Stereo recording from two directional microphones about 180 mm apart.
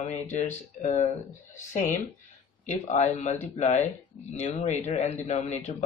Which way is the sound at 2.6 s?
40° left (ahead or behind).